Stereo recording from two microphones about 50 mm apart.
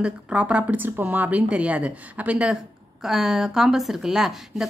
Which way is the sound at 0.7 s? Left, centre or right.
Right.